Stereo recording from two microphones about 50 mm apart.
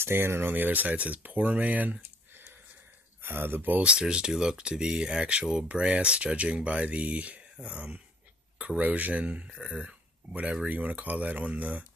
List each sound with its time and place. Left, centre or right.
0.0 s speech: right
2.0 s a sound: right
3.2 s speech: right
3.8 s speech: centre